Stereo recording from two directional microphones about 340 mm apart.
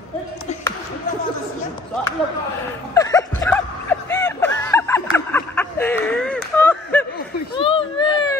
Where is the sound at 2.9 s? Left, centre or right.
Centre.